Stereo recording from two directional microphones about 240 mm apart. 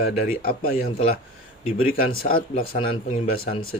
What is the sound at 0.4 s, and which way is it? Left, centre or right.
Speech, left.